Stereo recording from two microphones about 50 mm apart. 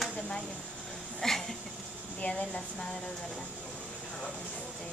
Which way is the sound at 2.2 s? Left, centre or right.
Left.